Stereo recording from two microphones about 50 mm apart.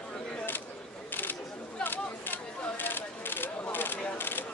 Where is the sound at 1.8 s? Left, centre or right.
Left.